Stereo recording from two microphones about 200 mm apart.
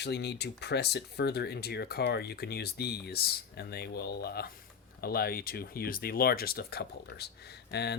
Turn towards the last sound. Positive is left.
turn(degrees=55)  # may be behind; listen again after turning